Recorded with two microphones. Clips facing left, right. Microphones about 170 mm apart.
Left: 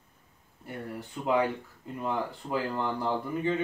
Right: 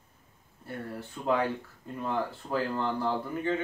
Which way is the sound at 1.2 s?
15° left (ahead or behind).